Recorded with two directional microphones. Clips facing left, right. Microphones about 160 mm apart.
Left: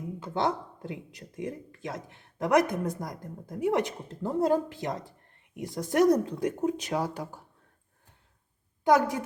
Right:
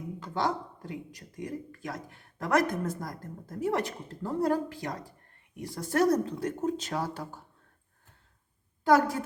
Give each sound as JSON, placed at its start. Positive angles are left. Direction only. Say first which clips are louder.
{"t": 0.2, "sound": "speech", "louder": "left 2 dB", "side_deg": 25}
{"t": 8.8, "sound": "a woman's voice", "louder": "even", "side_deg": 20}